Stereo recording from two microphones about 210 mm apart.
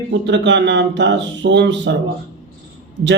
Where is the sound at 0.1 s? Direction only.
60° right (ahead or behind).